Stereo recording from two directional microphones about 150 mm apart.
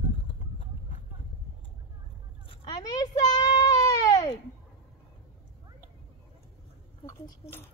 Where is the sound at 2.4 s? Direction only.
25° left (ahead or behind).